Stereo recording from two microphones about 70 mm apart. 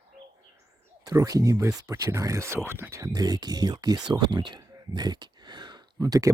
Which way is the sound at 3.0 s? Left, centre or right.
Right.